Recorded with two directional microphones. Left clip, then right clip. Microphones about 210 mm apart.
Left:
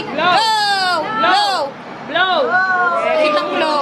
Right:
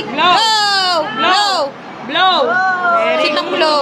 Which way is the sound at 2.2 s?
50° right (ahead or behind).